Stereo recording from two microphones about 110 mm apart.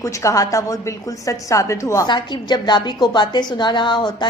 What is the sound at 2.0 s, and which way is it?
A woman's voice, 45° left (ahead or behind).